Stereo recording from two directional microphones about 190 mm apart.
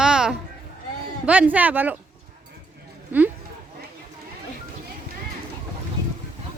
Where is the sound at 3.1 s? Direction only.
10° right (ahead or behind).